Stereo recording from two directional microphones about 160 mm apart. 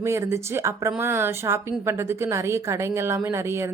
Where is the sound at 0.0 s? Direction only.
15° right (ahead or behind).